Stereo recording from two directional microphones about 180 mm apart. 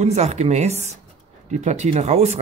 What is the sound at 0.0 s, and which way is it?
Speech, 35° right (ahead or behind).